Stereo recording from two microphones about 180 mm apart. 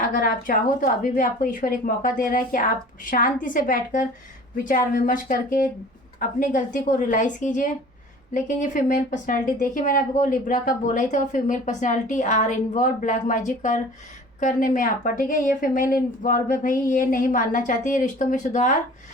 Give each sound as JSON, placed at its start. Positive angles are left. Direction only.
{"t": 0.1, "sound": "a woman's voice", "side_deg": 50}